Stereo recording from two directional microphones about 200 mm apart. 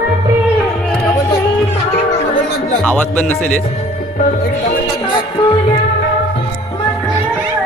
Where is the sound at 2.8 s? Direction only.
5° left (ahead or behind).